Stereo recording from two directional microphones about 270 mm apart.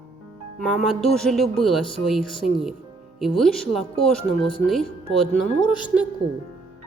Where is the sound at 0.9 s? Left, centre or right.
Centre.